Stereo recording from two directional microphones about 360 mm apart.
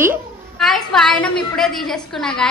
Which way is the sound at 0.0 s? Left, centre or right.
Centre.